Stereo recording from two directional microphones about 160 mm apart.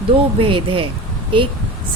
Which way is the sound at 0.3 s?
35° right (ahead or behind).